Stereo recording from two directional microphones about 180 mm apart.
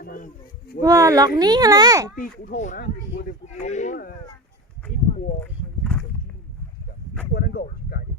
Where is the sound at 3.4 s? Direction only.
40° left (ahead or behind).